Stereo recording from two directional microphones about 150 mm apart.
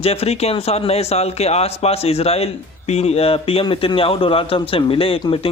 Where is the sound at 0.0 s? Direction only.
40° left (ahead or behind).